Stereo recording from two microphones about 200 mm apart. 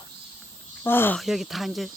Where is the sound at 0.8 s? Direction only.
10° left (ahead or behind).